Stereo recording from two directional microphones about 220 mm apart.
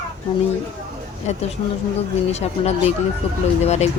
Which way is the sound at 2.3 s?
30° left (ahead or behind).